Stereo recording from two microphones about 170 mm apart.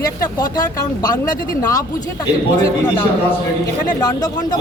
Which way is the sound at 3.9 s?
25° left (ahead or behind).